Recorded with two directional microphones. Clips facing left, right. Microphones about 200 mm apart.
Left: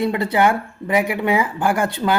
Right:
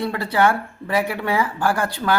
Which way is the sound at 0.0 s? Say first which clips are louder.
Left 2 dB; 20° left (ahead or behind).